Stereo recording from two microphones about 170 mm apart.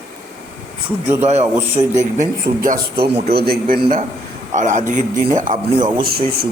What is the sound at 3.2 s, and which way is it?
Speech, 65° right (ahead or behind).